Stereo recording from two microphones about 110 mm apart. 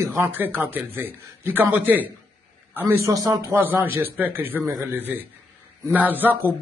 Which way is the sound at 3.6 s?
15° right (ahead or behind).